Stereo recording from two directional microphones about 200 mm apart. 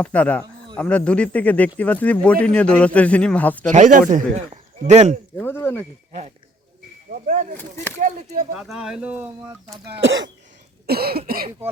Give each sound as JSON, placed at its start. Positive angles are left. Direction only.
{"t": 0.0, "sound": "a man's voice", "side_deg": 5}
{"t": 3.7, "sound": "speech", "side_deg": -40}
{"t": 5.4, "sound": "a man's voice", "side_deg": 10}
{"t": 7.1, "sound": "speech", "side_deg": -40}
{"t": 8.5, "sound": "speech", "side_deg": 0}
{"t": 10.0, "sound": "throat clearing", "side_deg": -65}
{"t": 10.8, "sound": "cough", "side_deg": -50}